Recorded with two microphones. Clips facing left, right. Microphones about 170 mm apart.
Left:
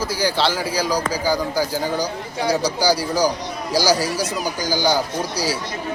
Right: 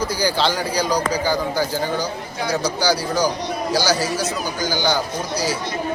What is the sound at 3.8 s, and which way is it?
Speech, 40° left (ahead or behind).